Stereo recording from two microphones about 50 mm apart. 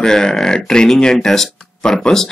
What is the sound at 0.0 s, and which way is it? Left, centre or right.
Speech, centre.